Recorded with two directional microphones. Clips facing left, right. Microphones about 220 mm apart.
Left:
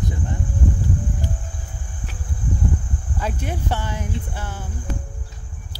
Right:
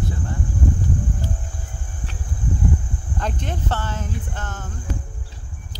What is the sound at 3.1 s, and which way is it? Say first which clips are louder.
Speech: left 1 dB; 10° left (ahead or behind).